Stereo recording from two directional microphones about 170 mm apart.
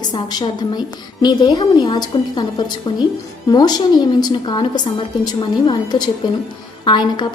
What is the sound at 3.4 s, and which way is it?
A woman's voice, 25° left (ahead or behind).